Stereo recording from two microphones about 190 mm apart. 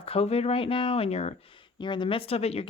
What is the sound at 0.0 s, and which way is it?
Speech, 30° left (ahead or behind).